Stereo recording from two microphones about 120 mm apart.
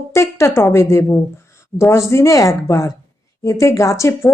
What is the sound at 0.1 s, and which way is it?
Speech, 25° left (ahead or behind).